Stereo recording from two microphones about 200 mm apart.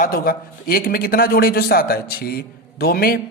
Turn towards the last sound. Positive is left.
turn(degrees=50)  # may be behind; listen again after turning